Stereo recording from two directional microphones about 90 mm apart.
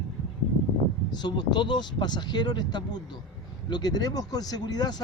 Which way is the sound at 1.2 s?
55° left (ahead or behind).